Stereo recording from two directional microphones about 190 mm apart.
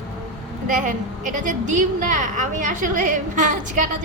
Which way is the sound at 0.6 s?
45° right (ahead or behind).